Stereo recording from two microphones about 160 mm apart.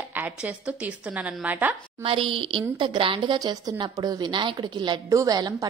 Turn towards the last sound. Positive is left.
turn(degrees=-25)  # may be behind; listen again after turning